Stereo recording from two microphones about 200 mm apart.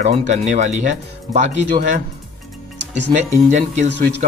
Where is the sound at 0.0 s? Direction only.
50° right (ahead or behind).